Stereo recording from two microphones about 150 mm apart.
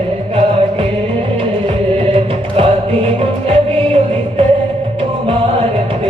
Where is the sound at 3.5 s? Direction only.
40° right (ahead or behind).